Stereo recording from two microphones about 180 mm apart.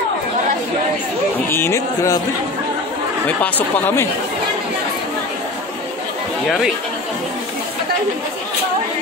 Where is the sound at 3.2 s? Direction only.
10° left (ahead or behind).